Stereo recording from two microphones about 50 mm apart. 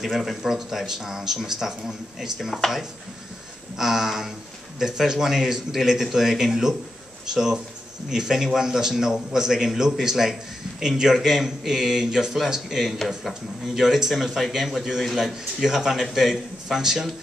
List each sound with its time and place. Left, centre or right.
0.0 s speech: centre